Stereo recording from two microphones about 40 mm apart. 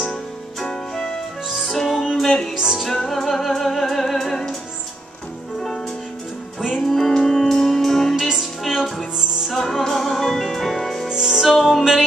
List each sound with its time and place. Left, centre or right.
0.7 s music: centre
1.7 s music: centre
2.5 s music: centre
2.8 s music: centre
6.8 s music: centre
8.3 s music: centre
9.5 s music: centre
11.1 s music: centre